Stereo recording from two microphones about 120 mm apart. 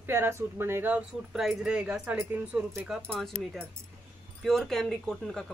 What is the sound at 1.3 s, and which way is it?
A woman's voice, centre (ahead or behind).